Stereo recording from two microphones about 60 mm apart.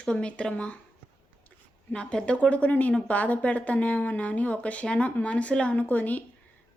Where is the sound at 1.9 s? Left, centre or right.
Centre.